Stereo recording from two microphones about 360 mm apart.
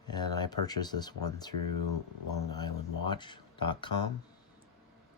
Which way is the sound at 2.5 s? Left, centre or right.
Centre.